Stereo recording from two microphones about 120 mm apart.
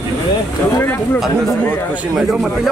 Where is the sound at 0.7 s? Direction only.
20° left (ahead or behind).